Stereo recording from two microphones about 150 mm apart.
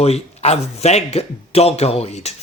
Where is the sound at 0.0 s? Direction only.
45° left (ahead or behind).